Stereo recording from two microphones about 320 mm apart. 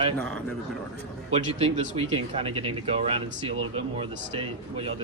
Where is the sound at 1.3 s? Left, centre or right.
Centre.